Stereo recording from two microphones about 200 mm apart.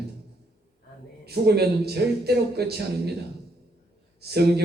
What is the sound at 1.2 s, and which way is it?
A man's voice, 55° right (ahead or behind).